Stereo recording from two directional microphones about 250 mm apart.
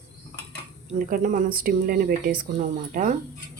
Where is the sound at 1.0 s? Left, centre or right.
Right.